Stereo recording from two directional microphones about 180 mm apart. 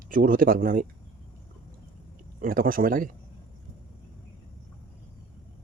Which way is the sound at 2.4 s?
50° right (ahead or behind).